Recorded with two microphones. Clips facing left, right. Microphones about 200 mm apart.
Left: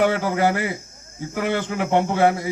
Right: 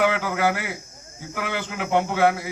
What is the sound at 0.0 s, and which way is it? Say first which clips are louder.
Speech: left 3 dB; 45° left (ahead or behind).